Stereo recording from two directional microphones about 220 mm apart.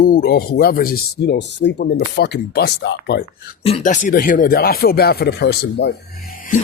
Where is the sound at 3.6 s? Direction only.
30° left (ahead or behind); by 5.9 s 50° left (ahead or behind).